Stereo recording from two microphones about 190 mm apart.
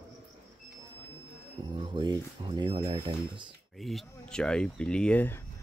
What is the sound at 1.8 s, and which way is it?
Speech, 25° right (ahead or behind).